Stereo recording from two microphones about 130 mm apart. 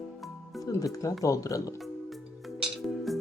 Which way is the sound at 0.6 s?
25° left (ahead or behind).